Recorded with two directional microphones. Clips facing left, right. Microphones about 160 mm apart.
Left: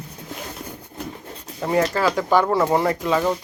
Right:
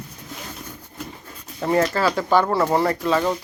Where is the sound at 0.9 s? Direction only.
35° left (ahead or behind).